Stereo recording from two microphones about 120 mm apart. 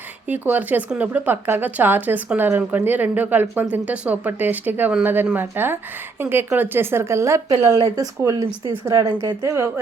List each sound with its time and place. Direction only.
0.3 s speech: 15° right (ahead or behind)